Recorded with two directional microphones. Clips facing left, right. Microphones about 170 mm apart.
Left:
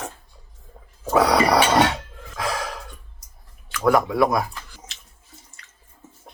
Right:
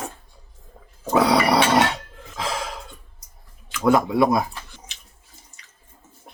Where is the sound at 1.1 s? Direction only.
25° right (ahead or behind).